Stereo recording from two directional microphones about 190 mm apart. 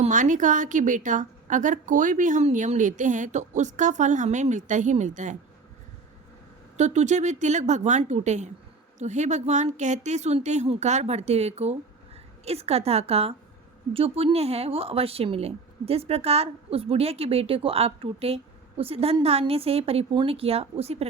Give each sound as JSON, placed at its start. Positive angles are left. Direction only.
{"t": 0.0, "sound": "a woman's voice", "side_deg": -40}
{"t": 6.7, "sound": "a woman's voice", "side_deg": -40}